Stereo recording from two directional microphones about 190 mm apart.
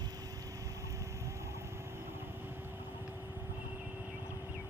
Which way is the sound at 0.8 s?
15° right (ahead or behind).